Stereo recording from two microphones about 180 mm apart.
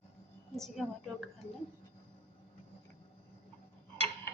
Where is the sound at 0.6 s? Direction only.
Centre (ahead or behind).